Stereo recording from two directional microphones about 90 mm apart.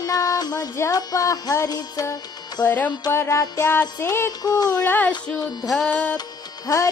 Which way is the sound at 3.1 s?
30° left (ahead or behind).